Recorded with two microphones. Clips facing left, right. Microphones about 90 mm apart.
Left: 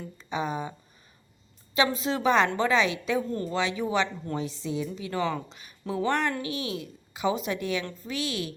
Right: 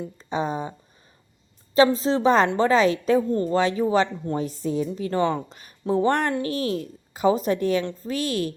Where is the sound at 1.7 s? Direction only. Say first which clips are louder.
Right 7 dB; 35° right (ahead or behind).